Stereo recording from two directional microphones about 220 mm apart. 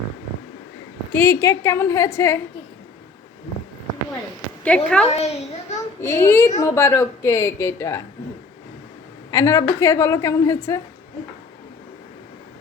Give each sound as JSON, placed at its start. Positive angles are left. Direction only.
{"t": 1.1, "sound": "a woman's voice", "side_deg": 10}
{"t": 4.6, "sound": "a woman's voice", "side_deg": 5}
{"t": 5.0, "sound": "a child's voice", "side_deg": 30}
{"t": 6.0, "sound": "a woman's voice", "side_deg": 15}
{"t": 9.3, "sound": "a woman's voice", "side_deg": 15}